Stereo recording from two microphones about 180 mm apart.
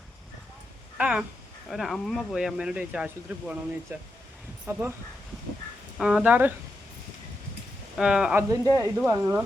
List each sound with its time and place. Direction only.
0.9 s speech: 5° right (ahead or behind)
4.6 s speech: 15° right (ahead or behind)
6.0 s speech: 5° right (ahead or behind)
7.9 s speech: 5° right (ahead or behind)
8.4 s speech: 20° right (ahead or behind)